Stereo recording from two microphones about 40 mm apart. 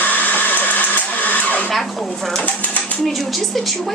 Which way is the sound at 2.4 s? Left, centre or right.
Left.